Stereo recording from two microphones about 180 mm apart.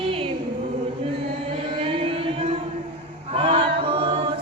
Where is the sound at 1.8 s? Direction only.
30° right (ahead or behind).